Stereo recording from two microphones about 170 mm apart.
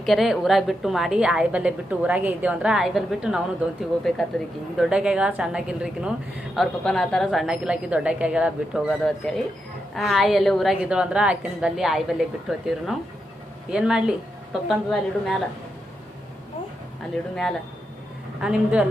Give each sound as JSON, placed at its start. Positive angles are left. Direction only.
{"t": 0.0, "sound": "a woman's voice", "side_deg": 0}
{"t": 18.3, "sound": "a woman's voice", "side_deg": -5}